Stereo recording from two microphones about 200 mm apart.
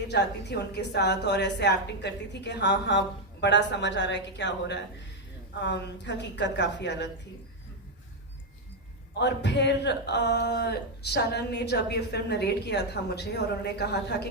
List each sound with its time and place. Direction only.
0.1 s speech: 60° left (ahead or behind)
9.1 s speech: 60° left (ahead or behind)